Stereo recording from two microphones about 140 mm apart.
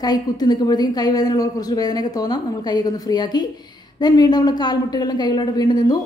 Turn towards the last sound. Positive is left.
turn(degrees=30)  # may be behind; listen again after turning